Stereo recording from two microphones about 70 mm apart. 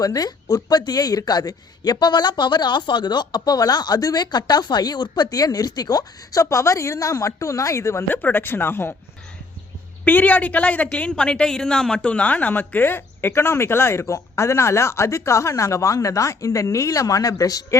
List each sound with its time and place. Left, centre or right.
0.0 s speech: left
8.1 s a woman's voice: left
10.0 s a woman's voice: left